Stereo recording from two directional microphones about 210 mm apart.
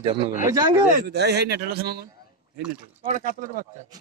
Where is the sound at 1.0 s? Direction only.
50° right (ahead or behind).